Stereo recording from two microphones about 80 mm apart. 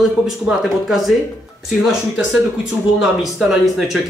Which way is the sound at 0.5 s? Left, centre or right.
Centre.